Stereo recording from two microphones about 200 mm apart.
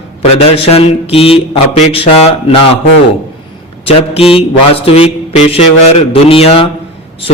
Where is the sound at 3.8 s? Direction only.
30° left (ahead or behind).